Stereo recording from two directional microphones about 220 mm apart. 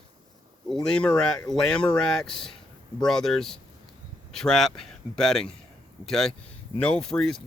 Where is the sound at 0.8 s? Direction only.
5° left (ahead or behind).